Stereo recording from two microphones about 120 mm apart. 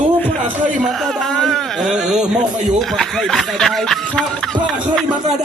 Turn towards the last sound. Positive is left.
turn(degrees=5)  # may be behind; listen again after turning